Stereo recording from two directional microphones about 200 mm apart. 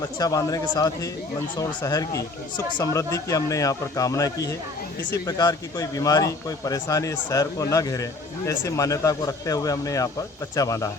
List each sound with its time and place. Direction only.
0.2 s speech: 20° left (ahead or behind)